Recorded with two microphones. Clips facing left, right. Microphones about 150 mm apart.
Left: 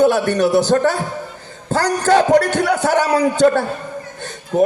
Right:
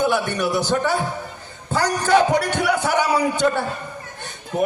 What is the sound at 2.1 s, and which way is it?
A man's voice, 65° left (ahead or behind).